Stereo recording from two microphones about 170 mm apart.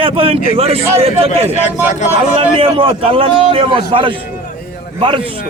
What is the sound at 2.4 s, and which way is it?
A man's voice, 35° right (ahead or behind).